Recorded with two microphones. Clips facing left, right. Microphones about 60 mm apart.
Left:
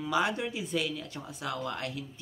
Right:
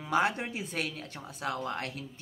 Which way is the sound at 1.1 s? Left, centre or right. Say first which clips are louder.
Right 1 dB; right.